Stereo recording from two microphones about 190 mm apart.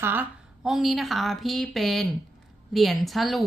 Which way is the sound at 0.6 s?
Centre (ahead or behind).